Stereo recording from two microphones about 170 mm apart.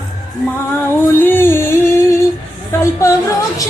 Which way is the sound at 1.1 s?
15° left (ahead or behind).